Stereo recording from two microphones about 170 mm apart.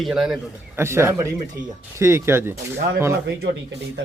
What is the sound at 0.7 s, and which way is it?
Speech, 15° right (ahead or behind).